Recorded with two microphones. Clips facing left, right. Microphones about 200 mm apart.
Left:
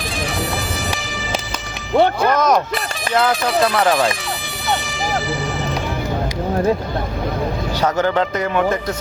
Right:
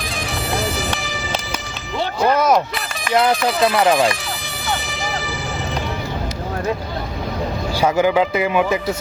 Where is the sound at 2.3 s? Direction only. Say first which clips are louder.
Even; 10° right (ahead or behind).